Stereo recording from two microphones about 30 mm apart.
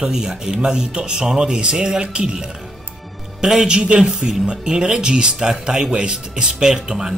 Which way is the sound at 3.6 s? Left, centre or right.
Right.